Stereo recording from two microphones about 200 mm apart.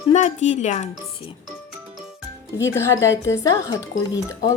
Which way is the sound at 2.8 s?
15° left (ahead or behind).